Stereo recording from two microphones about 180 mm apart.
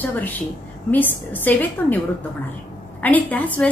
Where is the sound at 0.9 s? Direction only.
10° left (ahead or behind).